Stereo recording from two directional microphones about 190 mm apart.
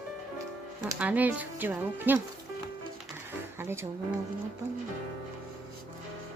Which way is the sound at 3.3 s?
10° right (ahead or behind).